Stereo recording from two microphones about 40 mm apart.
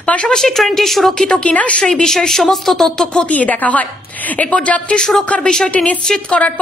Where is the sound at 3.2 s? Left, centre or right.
Left.